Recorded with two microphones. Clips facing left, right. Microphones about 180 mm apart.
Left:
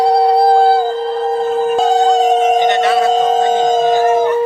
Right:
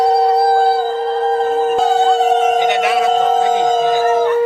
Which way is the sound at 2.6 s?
10° right (ahead or behind).